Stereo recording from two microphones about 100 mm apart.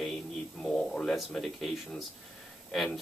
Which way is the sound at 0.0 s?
5° left (ahead or behind).